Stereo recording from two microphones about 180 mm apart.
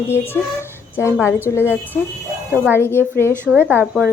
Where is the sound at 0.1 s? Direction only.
15° left (ahead or behind).